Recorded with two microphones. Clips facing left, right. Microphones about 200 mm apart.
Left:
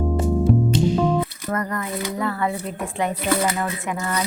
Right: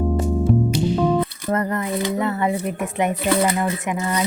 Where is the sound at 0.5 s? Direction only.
Centre (ahead or behind).